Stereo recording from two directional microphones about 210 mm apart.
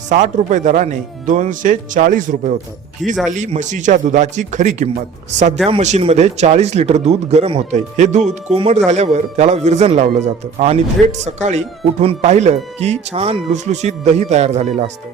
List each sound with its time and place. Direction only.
0.1 s a man's voice: 35° right (ahead or behind)